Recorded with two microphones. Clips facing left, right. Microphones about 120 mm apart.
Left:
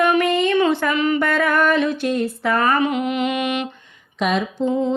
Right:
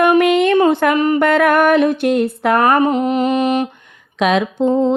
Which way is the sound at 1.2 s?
65° right (ahead or behind).